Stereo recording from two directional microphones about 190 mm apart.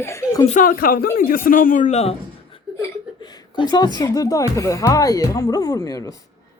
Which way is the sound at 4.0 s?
15° left (ahead or behind).